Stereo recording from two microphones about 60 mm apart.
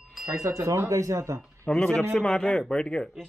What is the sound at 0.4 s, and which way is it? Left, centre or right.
Speech, right.